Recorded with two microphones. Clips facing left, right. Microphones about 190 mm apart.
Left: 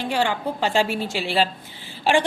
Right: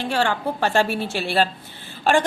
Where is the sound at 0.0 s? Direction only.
15° left (ahead or behind).